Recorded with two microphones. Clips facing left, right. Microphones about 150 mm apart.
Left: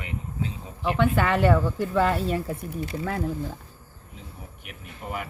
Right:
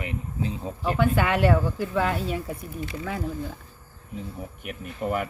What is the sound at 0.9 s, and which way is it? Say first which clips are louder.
Speech: left 1 dB; centre (ahead or behind).